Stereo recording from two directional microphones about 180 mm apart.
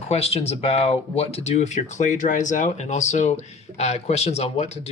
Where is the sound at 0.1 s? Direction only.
35° left (ahead or behind).